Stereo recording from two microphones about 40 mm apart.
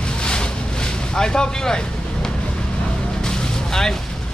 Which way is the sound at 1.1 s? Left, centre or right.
Centre.